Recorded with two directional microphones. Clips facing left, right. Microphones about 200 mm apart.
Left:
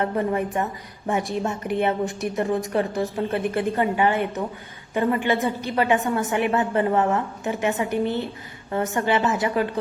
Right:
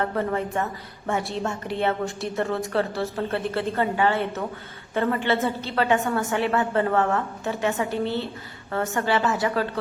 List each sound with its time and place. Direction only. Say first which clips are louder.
0.0 s a woman's voice: left 2 dB; 20° left (ahead or behind)